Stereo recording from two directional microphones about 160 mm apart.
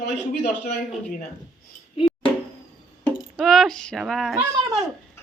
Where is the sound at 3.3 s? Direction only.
Centre (ahead or behind).